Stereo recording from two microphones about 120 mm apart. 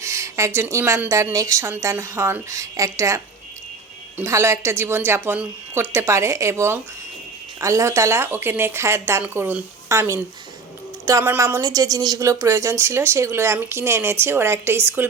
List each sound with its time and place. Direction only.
0.0 s a woman's voice: 25° right (ahead or behind)
4.2 s a woman's voice: 25° right (ahead or behind)